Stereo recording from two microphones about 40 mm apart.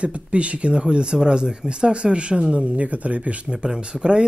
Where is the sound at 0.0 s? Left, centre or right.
Right.